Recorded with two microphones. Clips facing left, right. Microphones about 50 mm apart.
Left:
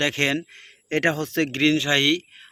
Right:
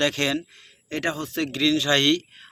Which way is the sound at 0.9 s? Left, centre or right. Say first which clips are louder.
Left 5 dB; left.